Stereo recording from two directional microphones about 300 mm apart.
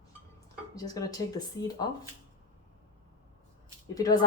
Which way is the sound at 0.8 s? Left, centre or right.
Centre.